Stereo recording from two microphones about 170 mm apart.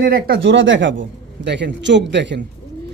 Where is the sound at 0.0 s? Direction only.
60° right (ahead or behind); by 2.4 s 90° right.